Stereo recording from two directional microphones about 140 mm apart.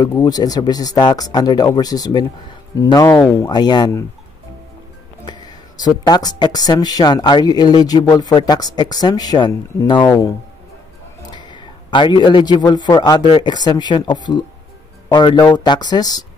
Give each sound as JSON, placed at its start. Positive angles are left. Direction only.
{"t": 0.2, "sound": "speech", "side_deg": 25}
{"t": 5.8, "sound": "speech", "side_deg": 30}
{"t": 11.3, "sound": "a man's voice", "side_deg": 35}